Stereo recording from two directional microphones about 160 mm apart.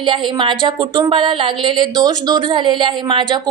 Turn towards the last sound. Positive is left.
turn(degrees=-30)  # may be behind; listen again after turning